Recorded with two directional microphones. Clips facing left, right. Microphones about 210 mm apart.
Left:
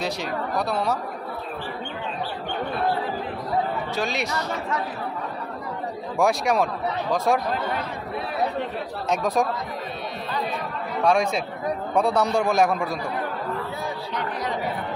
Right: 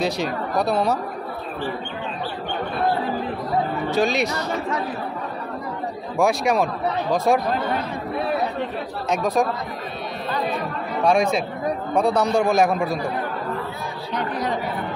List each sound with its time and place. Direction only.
0.0 s speech: 15° right (ahead or behind)
3.9 s speech: 15° right (ahead or behind)
6.1 s speech: 5° right (ahead or behind)
9.1 s speech: centre (ahead or behind)
11.1 s speech: centre (ahead or behind)